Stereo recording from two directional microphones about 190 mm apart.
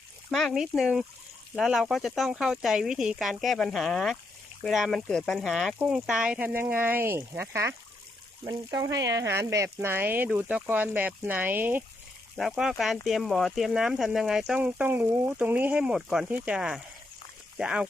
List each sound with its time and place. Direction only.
0.3 s speech: centre (ahead or behind)